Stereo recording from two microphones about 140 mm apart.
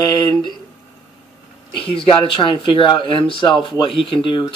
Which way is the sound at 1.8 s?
40° left (ahead or behind).